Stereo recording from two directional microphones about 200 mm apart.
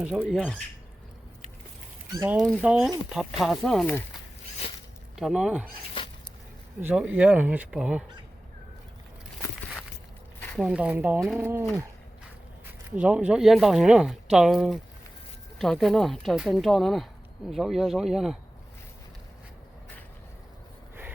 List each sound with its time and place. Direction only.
0.0 s speech: 5° right (ahead or behind)
2.1 s speech: 10° right (ahead or behind)
5.1 s speech: centre (ahead or behind)
6.0 s a sound: 25° left (ahead or behind)
6.8 s speech: 10° right (ahead or behind)
10.4 s speech: centre (ahead or behind)
13.0 s speech: 5° right (ahead or behind)